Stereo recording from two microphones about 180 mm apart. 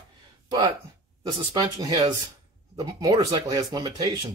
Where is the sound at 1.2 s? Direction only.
25° right (ahead or behind).